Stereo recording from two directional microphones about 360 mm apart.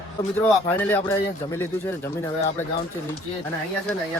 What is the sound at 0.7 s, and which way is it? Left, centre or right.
Speech, centre.